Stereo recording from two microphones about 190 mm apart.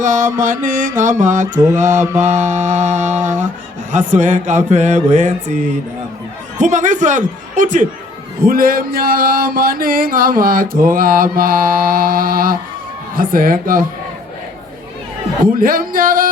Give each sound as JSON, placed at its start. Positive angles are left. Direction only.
{"t": 0.0, "sound": "mantra", "side_deg": -40}
{"t": 1.5, "sound": "mantra", "side_deg": -15}
{"t": 2.3, "sound": "mantra", "side_deg": -40}
{"t": 15.5, "sound": "mantra", "side_deg": -50}